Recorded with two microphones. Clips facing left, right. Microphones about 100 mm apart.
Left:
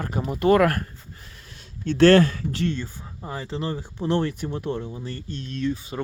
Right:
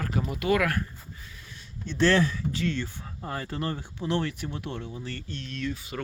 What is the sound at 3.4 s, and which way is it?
Speech, 25° left (ahead or behind).